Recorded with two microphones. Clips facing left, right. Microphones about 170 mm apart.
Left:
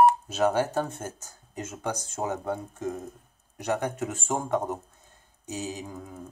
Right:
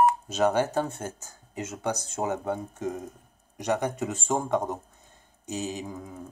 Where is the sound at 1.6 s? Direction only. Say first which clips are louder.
Right 2 dB; 10° left (ahead or behind).